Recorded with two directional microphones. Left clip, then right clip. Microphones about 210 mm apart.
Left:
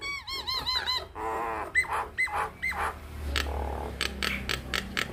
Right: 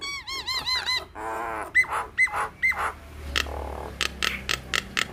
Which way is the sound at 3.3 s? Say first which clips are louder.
Right 4 dB; 20° right (ahead or behind).